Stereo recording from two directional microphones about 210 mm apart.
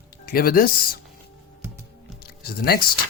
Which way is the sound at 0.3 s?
45° left (ahead or behind).